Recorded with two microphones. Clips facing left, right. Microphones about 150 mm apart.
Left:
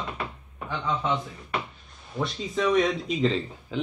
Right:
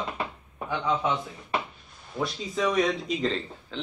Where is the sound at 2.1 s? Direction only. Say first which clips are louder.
Left 1 dB; centre (ahead or behind).